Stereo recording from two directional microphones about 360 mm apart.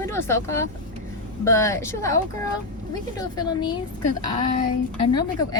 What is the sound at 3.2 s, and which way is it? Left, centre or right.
Speech, centre.